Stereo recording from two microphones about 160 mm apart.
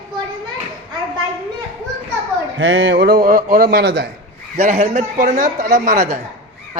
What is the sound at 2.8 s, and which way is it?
Speech, 85° right.